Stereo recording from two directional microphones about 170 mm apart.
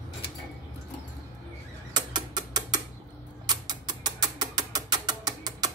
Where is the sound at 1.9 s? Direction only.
25° right (ahead or behind).